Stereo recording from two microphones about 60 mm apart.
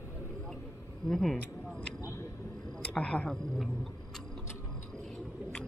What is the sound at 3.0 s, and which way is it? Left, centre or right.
Speech, left.